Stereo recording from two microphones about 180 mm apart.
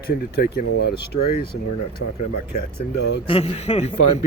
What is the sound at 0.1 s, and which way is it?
Speech, 60° left (ahead or behind).